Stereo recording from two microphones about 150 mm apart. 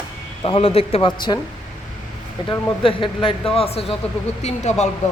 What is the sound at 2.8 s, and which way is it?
A man's voice, 35° left (ahead or behind).